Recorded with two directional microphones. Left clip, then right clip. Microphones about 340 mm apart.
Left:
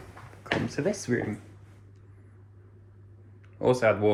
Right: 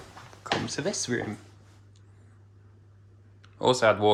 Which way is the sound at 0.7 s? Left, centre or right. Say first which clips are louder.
Left 1 dB; centre.